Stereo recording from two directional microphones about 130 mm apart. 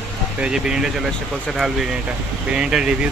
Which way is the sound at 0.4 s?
5° right (ahead or behind).